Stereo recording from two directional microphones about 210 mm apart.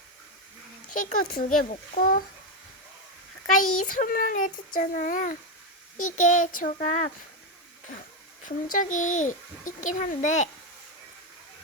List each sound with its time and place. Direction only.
0.9 s a child's voice: 40° left (ahead or behind)
3.6 s a child's voice: 90° left
3.8 s a child's voice: 40° left (ahead or behind)
8.4 s a child's voice: 40° left (ahead or behind)